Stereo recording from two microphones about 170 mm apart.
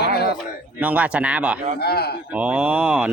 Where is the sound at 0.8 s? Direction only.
10° right (ahead or behind).